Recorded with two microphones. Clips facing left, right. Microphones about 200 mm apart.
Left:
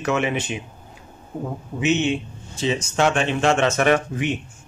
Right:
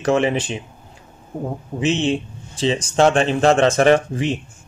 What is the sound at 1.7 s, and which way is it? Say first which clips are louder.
Speech: right 1 dB; 30° right (ahead or behind).